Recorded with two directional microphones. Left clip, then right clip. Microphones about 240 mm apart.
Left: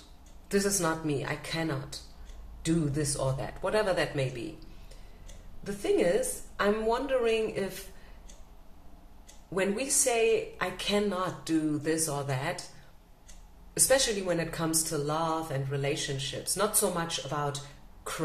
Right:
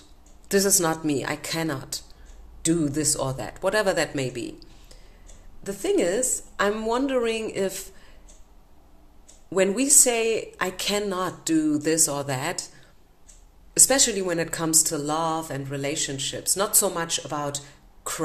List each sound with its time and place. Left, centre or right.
0.5 s speech: right
5.6 s speech: right
9.5 s speech: right
13.7 s speech: right